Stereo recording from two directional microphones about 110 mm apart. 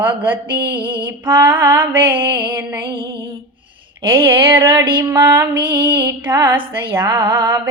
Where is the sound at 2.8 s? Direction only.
50° right (ahead or behind).